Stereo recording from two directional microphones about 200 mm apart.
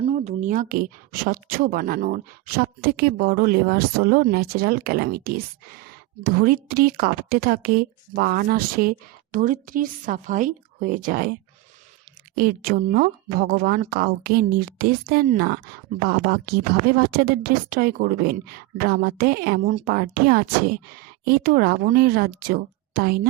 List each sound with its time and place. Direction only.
0.0 s a woman's voice: 35° right (ahead or behind)
12.4 s a woman's voice: 45° right (ahead or behind)